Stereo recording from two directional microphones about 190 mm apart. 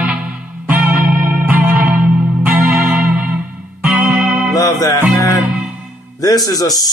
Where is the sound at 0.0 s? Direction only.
5° right (ahead or behind).